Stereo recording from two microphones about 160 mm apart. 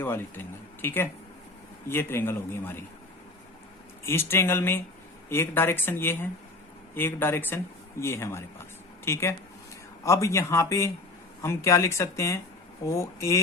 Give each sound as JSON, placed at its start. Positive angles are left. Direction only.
{"t": 0.0, "sound": "speech", "side_deg": 15}
{"t": 4.0, "sound": "speech", "side_deg": 15}